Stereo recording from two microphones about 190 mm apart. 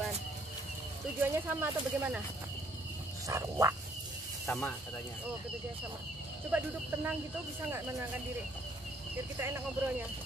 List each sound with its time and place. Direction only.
1.2 s speech: 10° right (ahead or behind)
3.3 s speech: 15° right (ahead or behind)
4.5 s speech: 5° left (ahead or behind)
6.5 s speech: 5° right (ahead or behind)
9.4 s speech: 10° right (ahead or behind)